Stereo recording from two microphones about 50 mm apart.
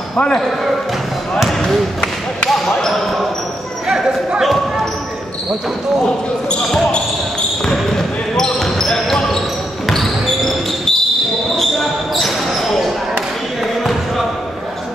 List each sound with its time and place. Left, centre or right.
0.1 s speech: left
3.8 s a sound: centre
4.4 s basketball bounce: centre
8.4 s basketball bounce: centre
12.2 s basketball bounce: centre